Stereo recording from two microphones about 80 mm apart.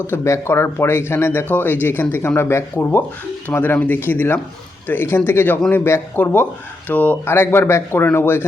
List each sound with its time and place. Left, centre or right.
0.1 s speech: left